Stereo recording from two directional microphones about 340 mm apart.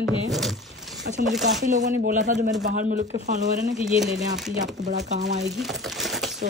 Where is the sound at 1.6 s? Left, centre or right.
Right.